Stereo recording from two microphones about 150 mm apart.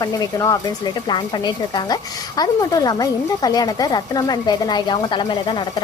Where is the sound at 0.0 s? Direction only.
25° left (ahead or behind).